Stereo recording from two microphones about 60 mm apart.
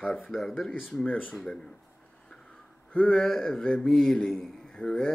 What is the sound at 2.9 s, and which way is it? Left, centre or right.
Speech, left.